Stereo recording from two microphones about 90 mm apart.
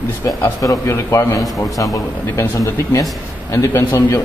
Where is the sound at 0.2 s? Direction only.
35° left (ahead or behind).